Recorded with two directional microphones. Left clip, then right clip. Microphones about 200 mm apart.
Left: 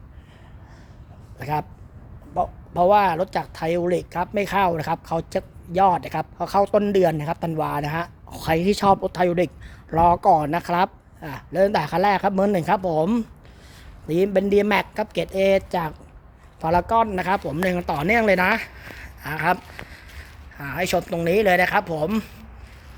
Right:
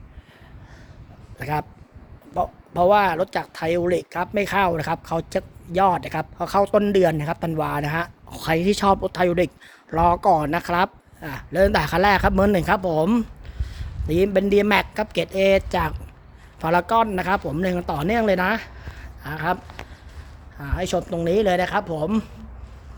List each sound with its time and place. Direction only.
1.4 s speech: centre (ahead or behind)
20.6 s speech: 5° left (ahead or behind)